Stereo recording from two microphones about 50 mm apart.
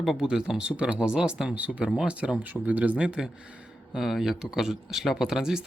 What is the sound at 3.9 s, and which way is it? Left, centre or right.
Speech, centre.